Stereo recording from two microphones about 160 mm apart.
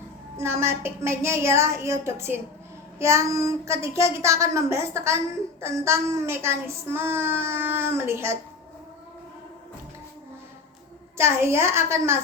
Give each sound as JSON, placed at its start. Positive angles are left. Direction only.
{"t": 0.3, "sound": "a woman's voice", "side_deg": -15}
{"t": 11.2, "sound": "a woman's voice", "side_deg": -15}